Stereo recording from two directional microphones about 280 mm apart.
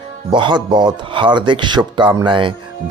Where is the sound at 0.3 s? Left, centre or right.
Centre.